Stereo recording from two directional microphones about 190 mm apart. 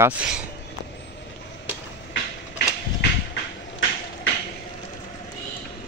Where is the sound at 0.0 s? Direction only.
5° right (ahead or behind).